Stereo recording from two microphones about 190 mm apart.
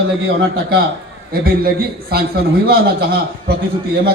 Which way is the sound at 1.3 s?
50° right (ahead or behind).